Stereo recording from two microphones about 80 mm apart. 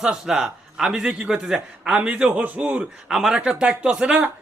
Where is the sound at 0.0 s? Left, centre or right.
Centre.